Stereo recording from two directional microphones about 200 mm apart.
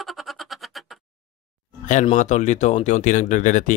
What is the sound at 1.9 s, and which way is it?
Speech, 35° left (ahead or behind).